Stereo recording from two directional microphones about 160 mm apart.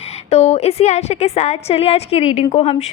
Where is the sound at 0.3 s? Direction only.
40° left (ahead or behind).